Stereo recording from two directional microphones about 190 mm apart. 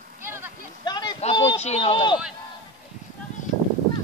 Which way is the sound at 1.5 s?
35° left (ahead or behind).